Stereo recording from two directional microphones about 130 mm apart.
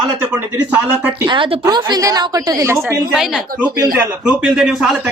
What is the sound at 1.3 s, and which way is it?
A woman's voice, 35° right (ahead or behind).